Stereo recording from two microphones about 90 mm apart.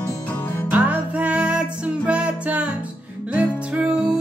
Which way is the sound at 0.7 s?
15° right (ahead or behind).